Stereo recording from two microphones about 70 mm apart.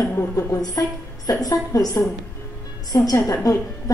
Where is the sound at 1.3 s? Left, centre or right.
Left.